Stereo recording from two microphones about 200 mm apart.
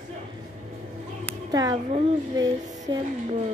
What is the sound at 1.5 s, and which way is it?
Speech, 20° right (ahead or behind).